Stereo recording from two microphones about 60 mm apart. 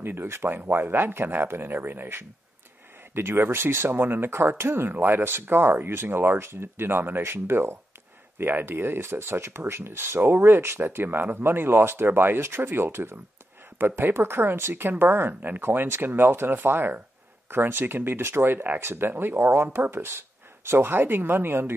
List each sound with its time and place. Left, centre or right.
0.0 s speech: right